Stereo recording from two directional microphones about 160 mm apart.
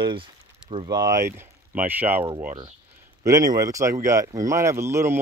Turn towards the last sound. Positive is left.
turn(degrees=-15)  # may be behind; listen again after turning